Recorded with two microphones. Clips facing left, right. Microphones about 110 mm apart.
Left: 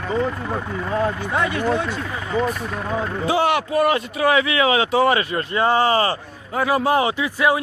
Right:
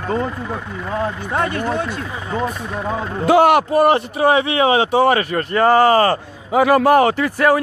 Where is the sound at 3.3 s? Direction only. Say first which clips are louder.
Right 8 dB; 50° right (ahead or behind).